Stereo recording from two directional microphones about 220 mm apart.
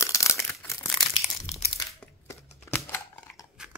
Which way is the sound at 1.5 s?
30° left (ahead or behind).